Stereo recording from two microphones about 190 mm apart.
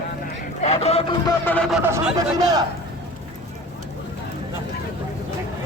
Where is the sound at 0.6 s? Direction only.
35° left (ahead or behind).